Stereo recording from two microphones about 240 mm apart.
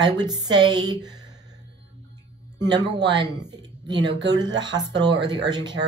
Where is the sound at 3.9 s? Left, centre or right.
Centre.